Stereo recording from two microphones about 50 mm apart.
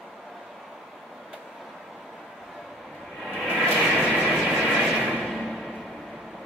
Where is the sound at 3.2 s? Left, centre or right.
Centre.